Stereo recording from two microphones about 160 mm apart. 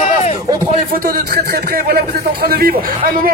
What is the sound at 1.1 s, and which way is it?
Speech, 75° right (ahead or behind).